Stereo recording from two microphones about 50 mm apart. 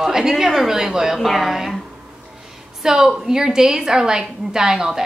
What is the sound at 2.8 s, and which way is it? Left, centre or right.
A woman's voice, centre.